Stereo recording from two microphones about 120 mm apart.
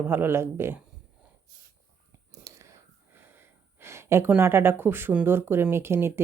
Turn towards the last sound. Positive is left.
turn(degrees=-20)  # may be behind; listen again after turning